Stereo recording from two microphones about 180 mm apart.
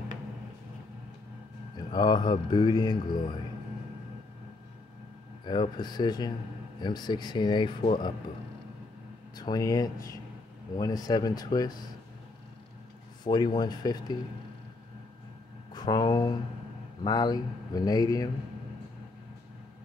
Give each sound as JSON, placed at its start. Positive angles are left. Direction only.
{"t": 1.9, "sound": "speech", "side_deg": 25}
{"t": 5.4, "sound": "speech", "side_deg": 25}
{"t": 9.4, "sound": "speech", "side_deg": 20}
{"t": 13.2, "sound": "speech", "side_deg": 25}
{"t": 15.7, "sound": "speech", "side_deg": 25}